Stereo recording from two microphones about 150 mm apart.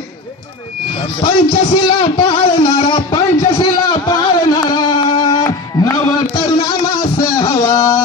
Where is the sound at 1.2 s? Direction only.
40° left (ahead or behind).